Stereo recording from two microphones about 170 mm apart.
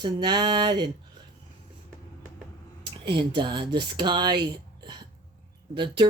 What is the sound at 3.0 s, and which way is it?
Speech, 30° right (ahead or behind).